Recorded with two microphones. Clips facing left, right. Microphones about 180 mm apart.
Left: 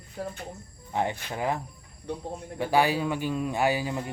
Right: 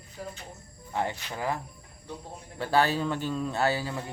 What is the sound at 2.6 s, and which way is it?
A man's voice, 15° left (ahead or behind).